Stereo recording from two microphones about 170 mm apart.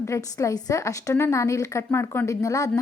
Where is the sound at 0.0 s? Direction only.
15° left (ahead or behind).